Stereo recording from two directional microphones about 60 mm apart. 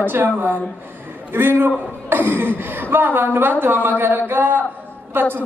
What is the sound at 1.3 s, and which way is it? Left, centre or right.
A man's voice, right.